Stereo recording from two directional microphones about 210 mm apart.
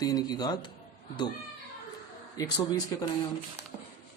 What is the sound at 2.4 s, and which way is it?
Speech, 15° left (ahead or behind).